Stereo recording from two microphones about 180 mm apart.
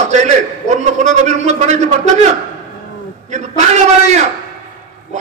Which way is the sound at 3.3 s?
40° right (ahead or behind).